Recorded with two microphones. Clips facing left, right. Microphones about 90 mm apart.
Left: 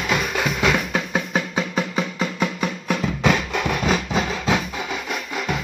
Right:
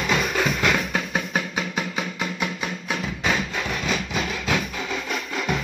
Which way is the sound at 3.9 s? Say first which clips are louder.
Left 4 dB; 35° left (ahead or behind).